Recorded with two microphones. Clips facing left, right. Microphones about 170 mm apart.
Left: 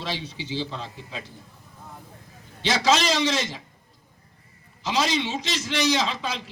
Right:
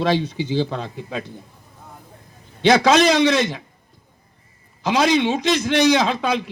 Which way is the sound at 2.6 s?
55° right (ahead or behind).